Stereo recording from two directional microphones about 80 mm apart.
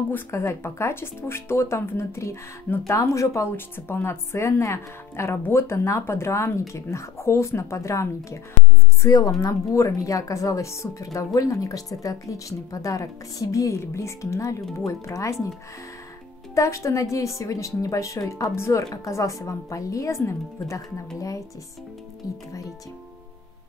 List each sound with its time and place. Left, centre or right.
0.1 s a woman's voice: left
3.5 s a woman's voice: left
16.5 s a woman's voice: left